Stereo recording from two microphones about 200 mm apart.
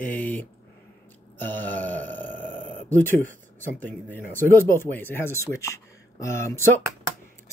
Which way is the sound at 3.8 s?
10° left (ahead or behind).